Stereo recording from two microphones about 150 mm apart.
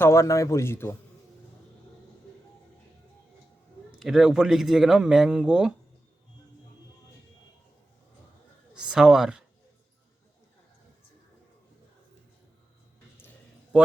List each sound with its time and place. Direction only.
0.0 s a man's voice: 20° left (ahead or behind)
4.0 s speech: 5° right (ahead or behind)
8.7 s speech: 5° right (ahead or behind)